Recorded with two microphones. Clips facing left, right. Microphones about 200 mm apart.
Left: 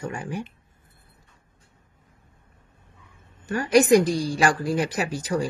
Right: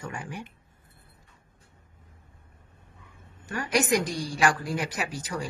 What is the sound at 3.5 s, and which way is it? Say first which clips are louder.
Speech: left 8 dB; 35° left (ahead or behind).